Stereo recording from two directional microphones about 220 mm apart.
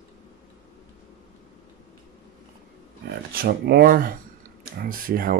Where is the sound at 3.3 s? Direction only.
45° right (ahead or behind).